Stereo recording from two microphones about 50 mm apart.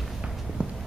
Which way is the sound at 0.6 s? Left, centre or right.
Right.